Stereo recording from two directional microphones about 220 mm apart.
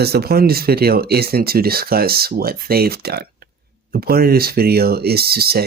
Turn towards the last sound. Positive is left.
turn(degrees=-45)  # may be behind; listen again after turning